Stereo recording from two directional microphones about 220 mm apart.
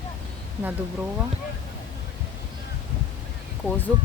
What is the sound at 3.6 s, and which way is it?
Speech, 10° left (ahead or behind).